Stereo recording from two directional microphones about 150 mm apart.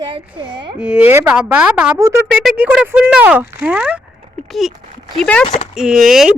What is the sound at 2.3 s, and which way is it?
A woman's voice, 5° right (ahead or behind).